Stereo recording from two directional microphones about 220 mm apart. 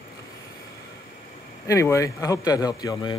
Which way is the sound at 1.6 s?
15° left (ahead or behind).